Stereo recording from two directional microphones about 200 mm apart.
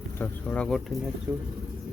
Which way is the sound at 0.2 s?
5° left (ahead or behind).